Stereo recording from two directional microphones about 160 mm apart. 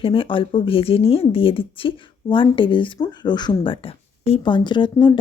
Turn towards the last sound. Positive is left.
turn(degrees=30)  # may be behind; listen again after turning